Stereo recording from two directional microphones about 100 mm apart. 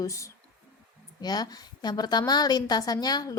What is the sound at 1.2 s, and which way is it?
A woman's voice, 45° left (ahead or behind).